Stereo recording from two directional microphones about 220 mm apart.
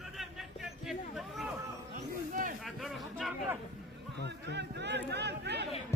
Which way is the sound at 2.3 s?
40° right (ahead or behind).